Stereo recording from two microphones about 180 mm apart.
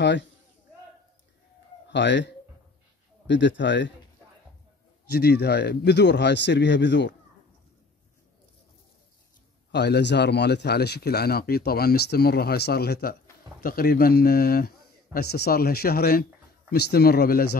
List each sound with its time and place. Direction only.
1.9 s speech: 80° left
5.1 s speech: 65° left (ahead or behind); by 7.2 s 80° left
9.7 s speech: 70° left (ahead or behind)